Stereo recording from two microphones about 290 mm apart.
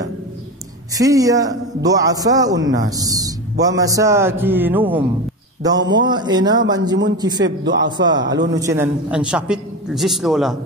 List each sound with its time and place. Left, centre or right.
0.9 s a man's voice: centre
7.4 s a man's voice: right
8.0 s a man's voice: centre